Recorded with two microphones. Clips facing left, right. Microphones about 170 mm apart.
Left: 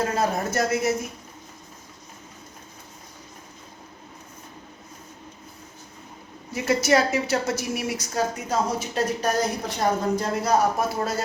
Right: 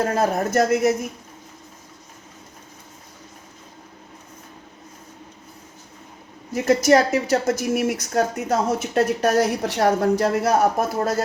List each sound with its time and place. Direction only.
0.0 s speech: 55° right (ahead or behind)
6.5 s a woman's voice: 45° right (ahead or behind)